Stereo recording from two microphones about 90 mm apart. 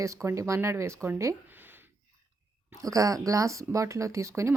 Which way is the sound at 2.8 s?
40° right (ahead or behind).